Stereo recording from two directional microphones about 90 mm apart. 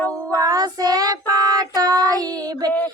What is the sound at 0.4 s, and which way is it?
Child singing, 45° right (ahead or behind).